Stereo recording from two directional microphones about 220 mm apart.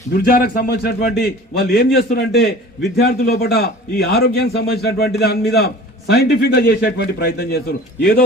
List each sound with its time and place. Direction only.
0.2 s a man's voice: 40° left (ahead or behind)